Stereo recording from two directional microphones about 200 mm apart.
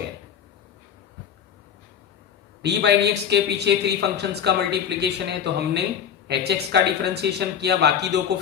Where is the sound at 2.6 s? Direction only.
55° right (ahead or behind).